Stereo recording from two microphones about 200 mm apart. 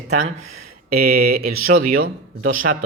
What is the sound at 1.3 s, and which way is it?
Speech, 50° right (ahead or behind).